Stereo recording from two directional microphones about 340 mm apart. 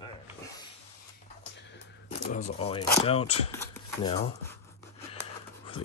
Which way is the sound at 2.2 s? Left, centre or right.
Left.